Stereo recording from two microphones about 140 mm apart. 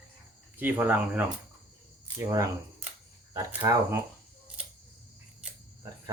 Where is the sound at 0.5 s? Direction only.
15° right (ahead or behind).